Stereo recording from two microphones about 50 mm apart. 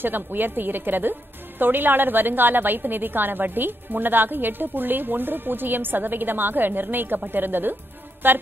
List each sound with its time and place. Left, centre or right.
0.0 s a woman's voice: right
8.2 s music: right